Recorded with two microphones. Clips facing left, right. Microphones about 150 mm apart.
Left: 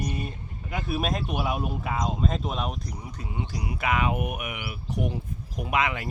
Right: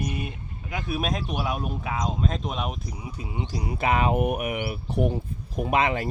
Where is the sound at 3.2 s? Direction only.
25° right (ahead or behind).